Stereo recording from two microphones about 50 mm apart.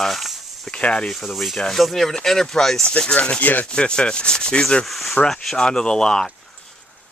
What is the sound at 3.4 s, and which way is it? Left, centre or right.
Rub, left.